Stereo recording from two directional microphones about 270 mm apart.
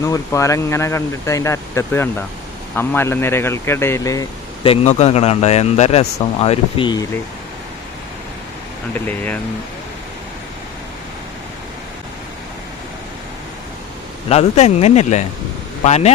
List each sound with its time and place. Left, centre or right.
0.0 s speech: centre
9.0 s speech: centre
14.3 s speech: left